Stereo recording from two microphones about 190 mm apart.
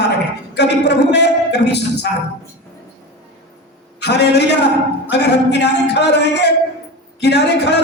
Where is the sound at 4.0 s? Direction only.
60° left (ahead or behind).